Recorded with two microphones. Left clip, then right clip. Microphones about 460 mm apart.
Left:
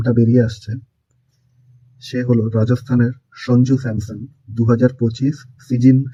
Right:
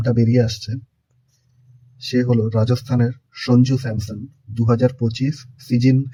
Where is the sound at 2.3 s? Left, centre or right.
Centre.